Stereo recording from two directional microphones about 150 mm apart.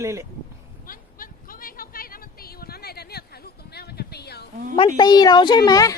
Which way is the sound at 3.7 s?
90° left.